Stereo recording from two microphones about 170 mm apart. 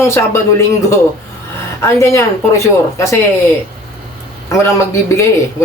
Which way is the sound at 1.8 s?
15° left (ahead or behind).